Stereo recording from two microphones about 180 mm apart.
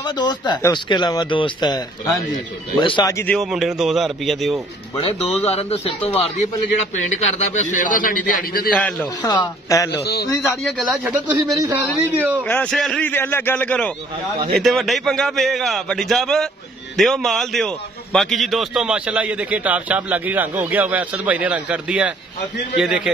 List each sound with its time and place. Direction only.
0.0 s a man's voice: 25° left (ahead or behind)
3.3 s speech: centre (ahead or behind)
4.9 s a man's voice: 35° left (ahead or behind); by 8.6 s 50° left (ahead or behind)
8.7 s a man's voice: 5° left (ahead or behind)
9.2 s speech: 20° left (ahead or behind)
9.8 s a man's voice: 65° left (ahead or behind)
10.2 s a man's voice: 15° left (ahead or behind)
10.8 s a man's voice: 5° right (ahead or behind)
12.4 s a man's voice: 5° left (ahead or behind)